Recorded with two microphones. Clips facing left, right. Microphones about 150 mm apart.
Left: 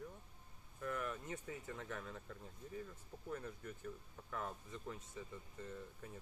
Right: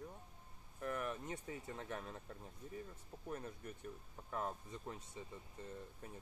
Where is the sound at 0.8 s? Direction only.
25° right (ahead or behind).